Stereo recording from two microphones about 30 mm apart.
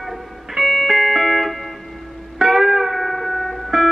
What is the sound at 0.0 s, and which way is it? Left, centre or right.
Music, centre.